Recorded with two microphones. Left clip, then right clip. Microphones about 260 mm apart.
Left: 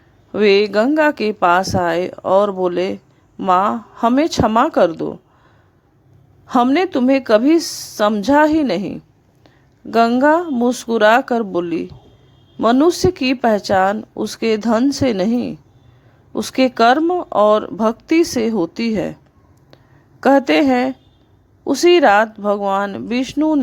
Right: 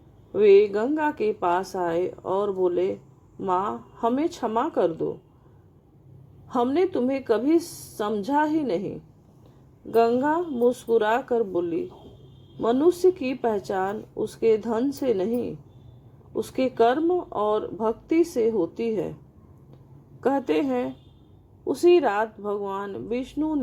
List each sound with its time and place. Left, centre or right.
0.3 s speech: left
6.5 s speech: left
20.2 s speech: left